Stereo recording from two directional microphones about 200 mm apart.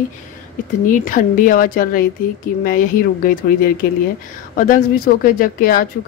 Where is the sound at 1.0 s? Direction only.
45° left (ahead or behind).